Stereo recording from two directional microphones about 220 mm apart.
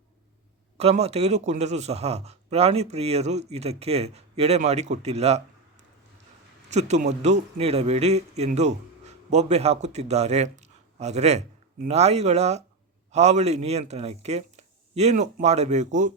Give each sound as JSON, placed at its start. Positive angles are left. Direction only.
{"t": 0.8, "sound": "speech", "side_deg": -30}
{"t": 6.7, "sound": "a man's voice", "side_deg": -30}